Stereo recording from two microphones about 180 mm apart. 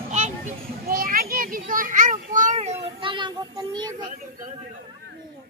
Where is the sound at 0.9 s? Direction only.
55° right (ahead or behind); by 4.1 s 25° right (ahead or behind).